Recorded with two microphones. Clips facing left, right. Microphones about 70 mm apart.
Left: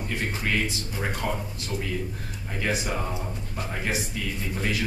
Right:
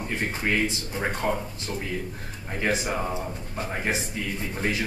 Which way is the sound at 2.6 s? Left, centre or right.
Right.